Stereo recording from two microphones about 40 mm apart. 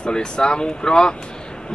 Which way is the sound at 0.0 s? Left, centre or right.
Left.